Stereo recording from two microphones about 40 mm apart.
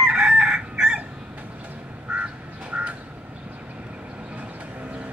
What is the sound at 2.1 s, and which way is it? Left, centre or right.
Duck, right.